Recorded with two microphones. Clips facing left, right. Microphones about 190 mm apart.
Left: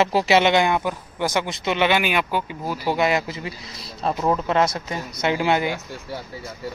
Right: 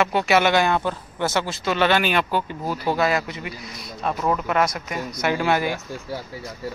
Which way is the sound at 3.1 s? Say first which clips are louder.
Left 1 dB; 25° left (ahead or behind).